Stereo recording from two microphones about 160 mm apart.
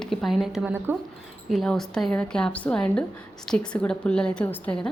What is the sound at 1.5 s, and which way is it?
A woman's voice, centre (ahead or behind).